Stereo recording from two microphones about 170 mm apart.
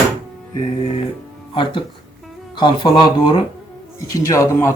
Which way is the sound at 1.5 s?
30° left (ahead or behind).